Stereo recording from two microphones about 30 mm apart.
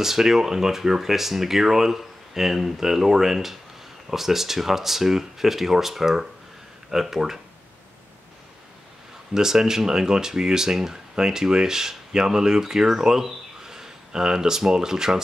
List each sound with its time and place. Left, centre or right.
0.0 s speech: centre
9.3 s speech: centre